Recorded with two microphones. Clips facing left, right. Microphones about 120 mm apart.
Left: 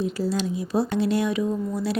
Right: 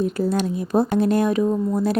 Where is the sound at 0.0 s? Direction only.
50° right (ahead or behind).